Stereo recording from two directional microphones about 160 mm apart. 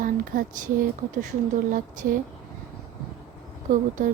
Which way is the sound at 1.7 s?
55° right (ahead or behind).